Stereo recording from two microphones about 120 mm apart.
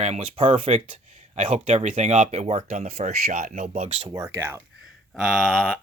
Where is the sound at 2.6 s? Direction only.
85° right.